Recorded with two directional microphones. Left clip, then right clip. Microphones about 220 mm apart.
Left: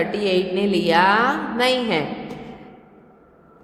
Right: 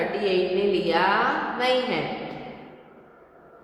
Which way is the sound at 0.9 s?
50° left (ahead or behind).